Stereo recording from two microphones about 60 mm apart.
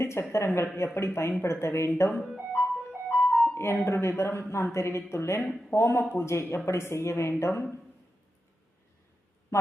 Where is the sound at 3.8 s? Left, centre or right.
Left.